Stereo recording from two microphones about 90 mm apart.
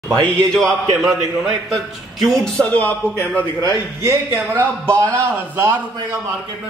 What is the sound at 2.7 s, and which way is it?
Speech, 20° left (ahead or behind).